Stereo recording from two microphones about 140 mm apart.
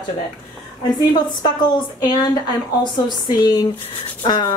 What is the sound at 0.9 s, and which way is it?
Speech, 30° left (ahead or behind).